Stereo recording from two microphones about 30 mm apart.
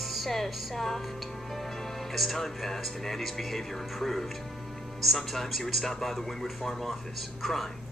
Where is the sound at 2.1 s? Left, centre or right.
Centre.